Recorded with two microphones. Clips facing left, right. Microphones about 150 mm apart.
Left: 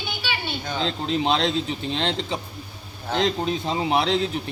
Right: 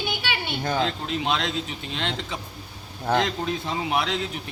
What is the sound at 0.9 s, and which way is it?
A man's voice, 30° left (ahead or behind).